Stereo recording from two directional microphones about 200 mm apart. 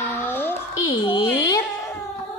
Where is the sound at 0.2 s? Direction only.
10° left (ahead or behind).